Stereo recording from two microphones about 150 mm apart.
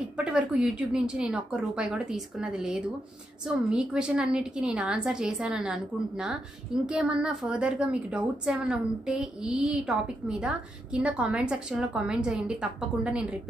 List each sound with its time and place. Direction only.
0.2 s a woman's voice: 5° right (ahead or behind)